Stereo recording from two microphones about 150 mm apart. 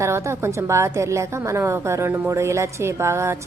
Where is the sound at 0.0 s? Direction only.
20° right (ahead or behind).